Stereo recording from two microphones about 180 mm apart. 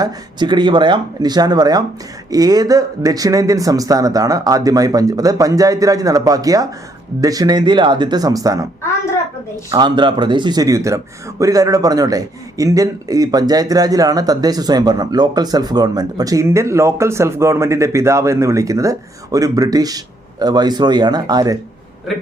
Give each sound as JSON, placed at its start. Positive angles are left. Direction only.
{"t": 0.0, "sound": "speech", "side_deg": -25}
{"t": 9.7, "sound": "speech", "side_deg": -25}